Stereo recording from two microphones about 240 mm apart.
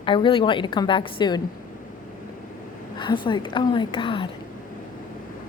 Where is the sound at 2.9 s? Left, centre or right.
Centre.